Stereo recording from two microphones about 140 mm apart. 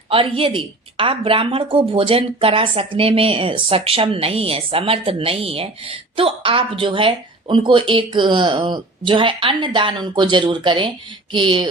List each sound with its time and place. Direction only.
0.1 s a woman's voice: 40° right (ahead or behind)